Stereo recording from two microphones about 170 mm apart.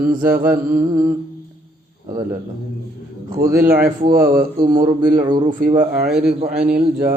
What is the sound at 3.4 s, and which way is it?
Mantra, 65° right (ahead or behind).